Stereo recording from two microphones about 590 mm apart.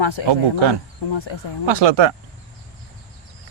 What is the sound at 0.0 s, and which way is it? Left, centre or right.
A man's voice, left.